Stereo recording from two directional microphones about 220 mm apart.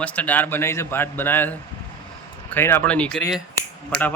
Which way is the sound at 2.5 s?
10° left (ahead or behind).